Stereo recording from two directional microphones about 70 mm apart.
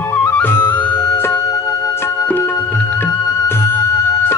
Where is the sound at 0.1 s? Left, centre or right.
Left.